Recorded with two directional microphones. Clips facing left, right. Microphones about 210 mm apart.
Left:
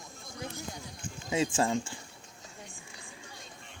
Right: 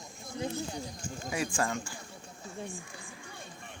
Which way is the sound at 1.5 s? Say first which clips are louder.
Left 4 dB; 25° left (ahead or behind).